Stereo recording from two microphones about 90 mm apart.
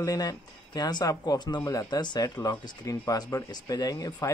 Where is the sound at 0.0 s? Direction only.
40° left (ahead or behind).